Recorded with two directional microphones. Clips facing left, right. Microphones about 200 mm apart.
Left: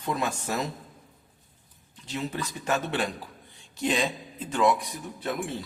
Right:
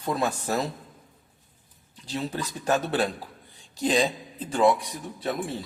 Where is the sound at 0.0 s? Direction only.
35° right (ahead or behind).